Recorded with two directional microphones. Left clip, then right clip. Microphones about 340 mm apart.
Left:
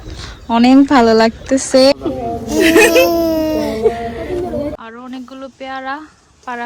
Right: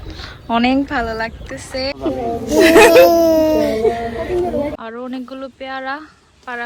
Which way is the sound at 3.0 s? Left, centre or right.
Centre.